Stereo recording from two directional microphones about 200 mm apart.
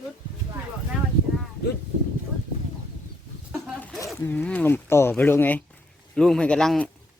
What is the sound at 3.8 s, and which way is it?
Zipper, 10° left (ahead or behind).